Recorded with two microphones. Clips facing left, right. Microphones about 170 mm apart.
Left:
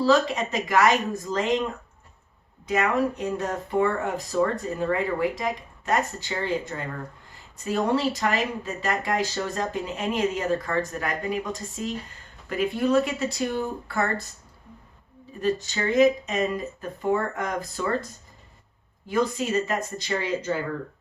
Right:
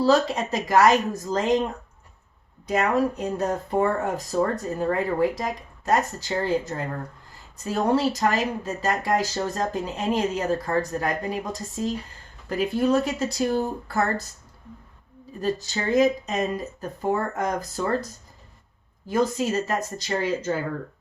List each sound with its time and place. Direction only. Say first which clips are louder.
0.0 s speech: right 1 dB; 35° right (ahead or behind)
2.6 s speech: right 1 dB; 35° right (ahead or behind)
15.4 s speech: left 1 dB; 40° right (ahead or behind)
19.0 s speech: right 2 dB; 40° right (ahead or behind)